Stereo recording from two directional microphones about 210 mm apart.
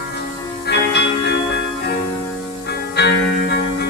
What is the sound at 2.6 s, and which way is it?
Music, 50° left (ahead or behind).